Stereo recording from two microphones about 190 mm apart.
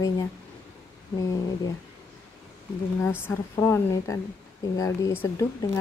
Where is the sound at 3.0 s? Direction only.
15° left (ahead or behind).